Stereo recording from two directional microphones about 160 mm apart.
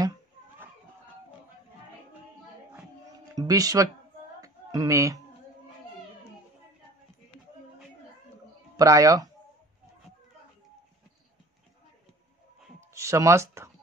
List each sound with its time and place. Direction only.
3.3 s speech: 20° right (ahead or behind)
4.4 s a sound: 20° right (ahead or behind)
8.7 s speech: 20° right (ahead or behind)
12.9 s speech: 20° right (ahead or behind)